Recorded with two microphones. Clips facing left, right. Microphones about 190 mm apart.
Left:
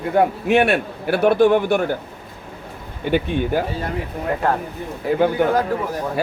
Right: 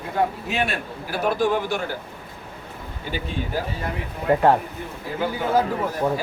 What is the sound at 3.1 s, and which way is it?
Speech, 60° left (ahead or behind).